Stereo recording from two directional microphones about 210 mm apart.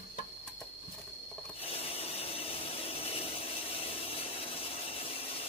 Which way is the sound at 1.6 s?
25° left (ahead or behind).